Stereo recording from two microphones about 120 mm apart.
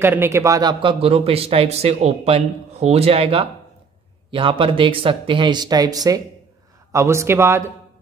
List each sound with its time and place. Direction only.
0.0 s a man's voice: 20° right (ahead or behind); by 0.9 s 35° right (ahead or behind)
1.0 s a man's voice: 55° right (ahead or behind); by 7.6 s 20° right (ahead or behind)